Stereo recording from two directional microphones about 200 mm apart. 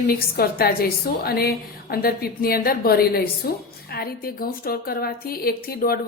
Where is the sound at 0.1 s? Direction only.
50° left (ahead or behind).